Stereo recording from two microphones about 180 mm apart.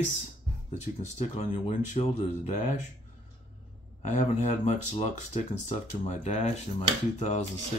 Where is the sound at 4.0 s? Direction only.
40° left (ahead or behind).